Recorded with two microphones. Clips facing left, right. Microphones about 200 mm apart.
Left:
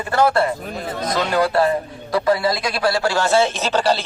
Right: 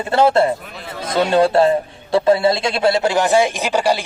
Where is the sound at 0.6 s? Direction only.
45° left (ahead or behind).